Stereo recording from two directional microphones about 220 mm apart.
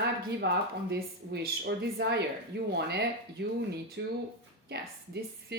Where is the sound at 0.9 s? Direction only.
45° right (ahead or behind).